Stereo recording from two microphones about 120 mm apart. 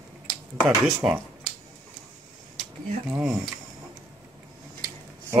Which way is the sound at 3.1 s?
10° right (ahead or behind).